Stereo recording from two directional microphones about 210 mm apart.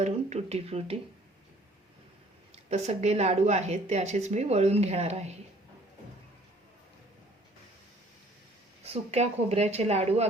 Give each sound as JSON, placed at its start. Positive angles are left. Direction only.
{"t": 0.0, "sound": "speech", "side_deg": -30}
{"t": 2.6, "sound": "speech", "side_deg": -30}
{"t": 8.8, "sound": "speech", "side_deg": -30}